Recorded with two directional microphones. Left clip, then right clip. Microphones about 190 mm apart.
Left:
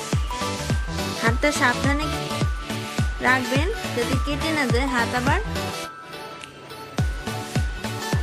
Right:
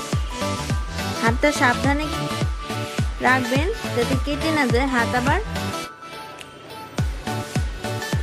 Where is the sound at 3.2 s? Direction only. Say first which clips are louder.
Right 2 dB; 15° right (ahead or behind).